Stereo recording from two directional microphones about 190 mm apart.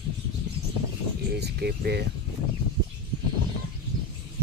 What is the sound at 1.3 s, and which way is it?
Speech, 60° right (ahead or behind).